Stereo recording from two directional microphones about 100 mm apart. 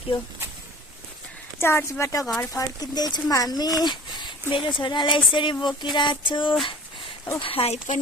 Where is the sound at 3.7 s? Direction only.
45° left (ahead or behind).